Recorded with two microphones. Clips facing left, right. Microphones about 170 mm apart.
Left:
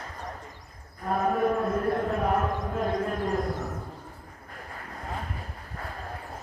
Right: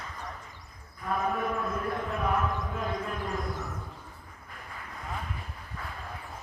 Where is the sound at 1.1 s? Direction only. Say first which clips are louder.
Left 5 dB; 40° left (ahead or behind).